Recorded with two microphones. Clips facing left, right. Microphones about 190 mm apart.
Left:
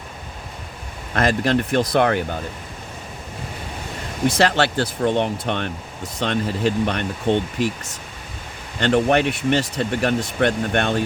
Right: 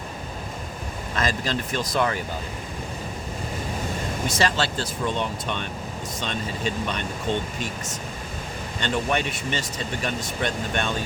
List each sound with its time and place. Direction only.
1.1 s speech: 60° left (ahead or behind)
4.3 s speech: 65° left (ahead or behind)
8.8 s speech: 60° left (ahead or behind)